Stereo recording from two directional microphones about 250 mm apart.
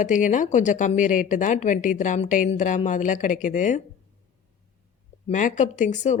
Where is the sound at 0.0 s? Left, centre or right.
Left.